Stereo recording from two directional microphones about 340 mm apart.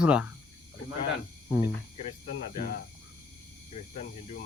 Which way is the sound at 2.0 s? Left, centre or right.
Centre.